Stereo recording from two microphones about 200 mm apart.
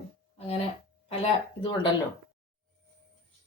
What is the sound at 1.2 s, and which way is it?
Speech, 30° left (ahead or behind).